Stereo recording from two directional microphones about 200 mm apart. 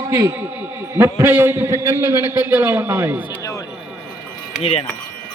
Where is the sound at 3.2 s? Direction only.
20° left (ahead or behind).